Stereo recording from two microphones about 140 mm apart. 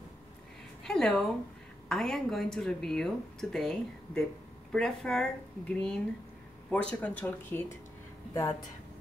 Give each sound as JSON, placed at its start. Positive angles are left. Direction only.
{"t": 0.8, "sound": "speech", "side_deg": 5}
{"t": 8.3, "sound": "speech", "side_deg": 25}